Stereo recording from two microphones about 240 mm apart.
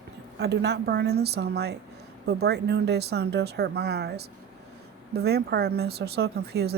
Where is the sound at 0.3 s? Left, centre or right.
Right.